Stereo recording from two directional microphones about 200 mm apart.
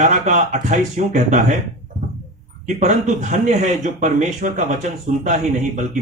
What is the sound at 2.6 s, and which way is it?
Speech, 35° right (ahead or behind).